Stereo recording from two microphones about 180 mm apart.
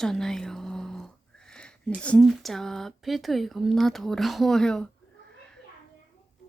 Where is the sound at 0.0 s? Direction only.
Centre (ahead or behind).